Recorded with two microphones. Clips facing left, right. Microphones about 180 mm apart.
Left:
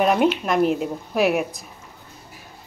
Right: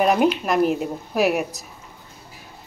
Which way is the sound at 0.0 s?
Centre (ahead or behind).